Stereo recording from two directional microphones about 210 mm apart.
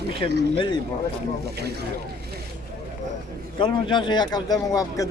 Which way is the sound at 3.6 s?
20° left (ahead or behind).